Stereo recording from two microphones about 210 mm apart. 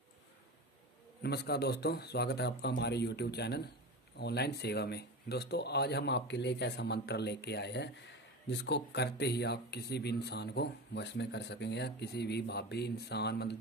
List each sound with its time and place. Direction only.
1.2 s speech: 50° left (ahead or behind)